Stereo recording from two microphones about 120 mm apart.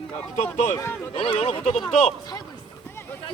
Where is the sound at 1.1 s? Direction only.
50° left (ahead or behind).